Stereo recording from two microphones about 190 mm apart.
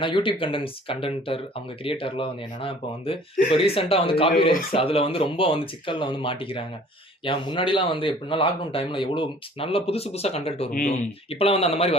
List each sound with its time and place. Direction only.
0.0 s speech: 25° left (ahead or behind)
10.7 s a man's voice: 40° left (ahead or behind)